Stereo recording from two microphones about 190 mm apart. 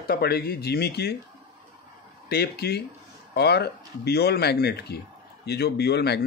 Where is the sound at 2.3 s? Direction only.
55° left (ahead or behind).